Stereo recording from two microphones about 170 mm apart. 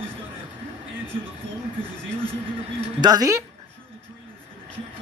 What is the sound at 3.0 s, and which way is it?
Speech, 20° right (ahead or behind).